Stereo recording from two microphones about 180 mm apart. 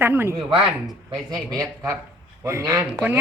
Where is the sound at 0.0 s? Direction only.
10° right (ahead or behind).